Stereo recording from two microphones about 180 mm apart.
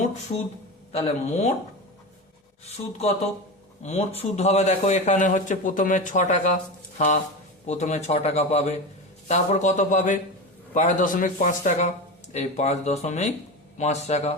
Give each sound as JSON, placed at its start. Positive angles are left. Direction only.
{"t": 0.9, "sound": "speech", "side_deg": 35}
{"t": 2.6, "sound": "a man's voice", "side_deg": 35}
{"t": 7.7, "sound": "a man's voice", "side_deg": 40}